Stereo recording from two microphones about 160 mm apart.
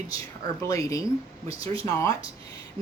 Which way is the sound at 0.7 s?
20° left (ahead or behind).